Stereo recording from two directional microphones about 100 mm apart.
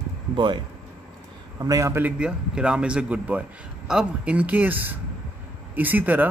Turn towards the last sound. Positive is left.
turn(degrees=-20)  # may be behind; listen again after turning